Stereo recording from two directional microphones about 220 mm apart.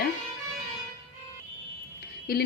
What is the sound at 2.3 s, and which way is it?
Speech, 45° left (ahead or behind).